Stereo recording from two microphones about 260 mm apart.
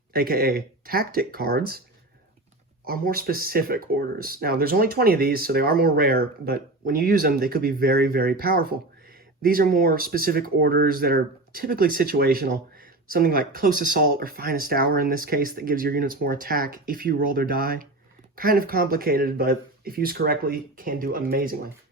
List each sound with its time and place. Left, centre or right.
0.1 s speech: right
2.8 s speech: right